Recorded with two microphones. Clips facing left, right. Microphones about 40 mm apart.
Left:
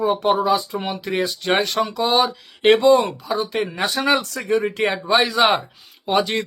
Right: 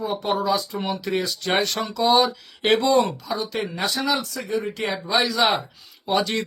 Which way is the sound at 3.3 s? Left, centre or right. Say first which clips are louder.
Left 4 dB; left.